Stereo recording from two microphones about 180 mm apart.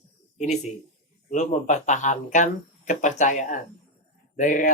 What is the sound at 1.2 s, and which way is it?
Speech, 40° left (ahead or behind).